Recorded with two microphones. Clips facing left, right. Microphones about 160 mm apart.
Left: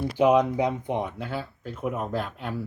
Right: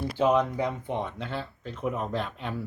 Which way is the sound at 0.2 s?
15° left (ahead or behind).